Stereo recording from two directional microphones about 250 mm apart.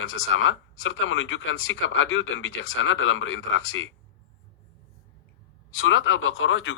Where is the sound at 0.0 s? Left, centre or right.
Left.